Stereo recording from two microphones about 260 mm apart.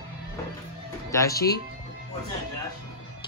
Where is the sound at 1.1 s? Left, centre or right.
Centre.